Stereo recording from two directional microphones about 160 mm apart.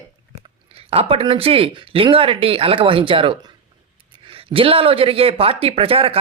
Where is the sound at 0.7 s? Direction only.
40° right (ahead or behind).